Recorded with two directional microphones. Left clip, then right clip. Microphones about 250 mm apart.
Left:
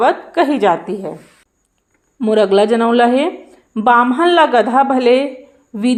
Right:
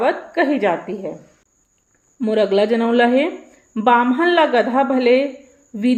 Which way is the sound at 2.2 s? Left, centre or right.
Centre.